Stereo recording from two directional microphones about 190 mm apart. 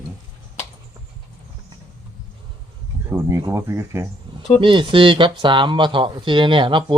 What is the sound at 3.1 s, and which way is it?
Speech, 15° right (ahead or behind).